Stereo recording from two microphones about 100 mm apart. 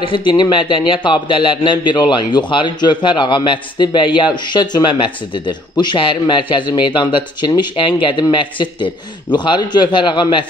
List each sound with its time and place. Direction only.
0.0 s a man's voice: 55° left (ahead or behind)